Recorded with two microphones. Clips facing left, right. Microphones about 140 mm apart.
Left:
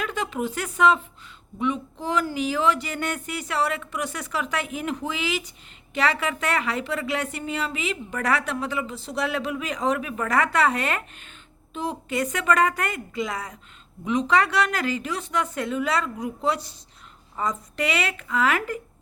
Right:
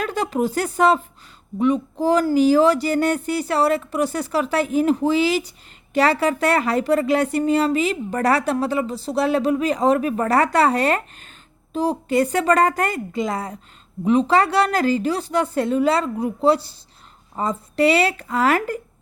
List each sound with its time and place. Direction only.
0.0 s speech: 40° right (ahead or behind)